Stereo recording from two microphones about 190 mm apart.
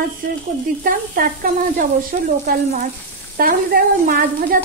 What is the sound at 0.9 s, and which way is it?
A woman's voice, 45° right (ahead or behind).